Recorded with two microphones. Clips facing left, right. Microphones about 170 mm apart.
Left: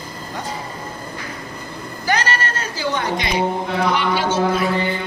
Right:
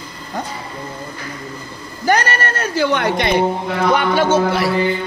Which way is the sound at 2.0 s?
55° right (ahead or behind).